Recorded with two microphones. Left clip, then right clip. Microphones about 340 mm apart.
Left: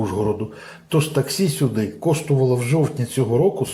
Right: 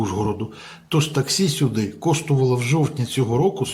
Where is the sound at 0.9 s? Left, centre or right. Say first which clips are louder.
Left 1 dB; centre.